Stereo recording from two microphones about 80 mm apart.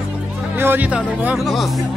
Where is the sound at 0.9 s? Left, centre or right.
Centre.